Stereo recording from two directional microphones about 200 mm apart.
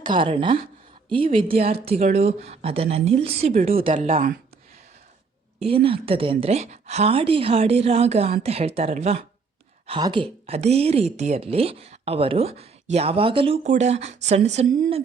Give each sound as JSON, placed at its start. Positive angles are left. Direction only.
{"t": 0.0, "sound": "a woman's voice", "side_deg": -25}
{"t": 5.6, "sound": "a woman's voice", "side_deg": -25}